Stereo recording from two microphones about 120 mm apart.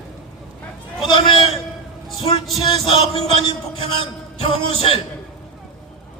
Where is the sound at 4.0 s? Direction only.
50° left (ahead or behind).